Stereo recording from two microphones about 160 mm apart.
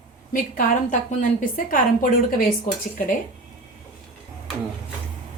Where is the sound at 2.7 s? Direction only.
50° left (ahead or behind).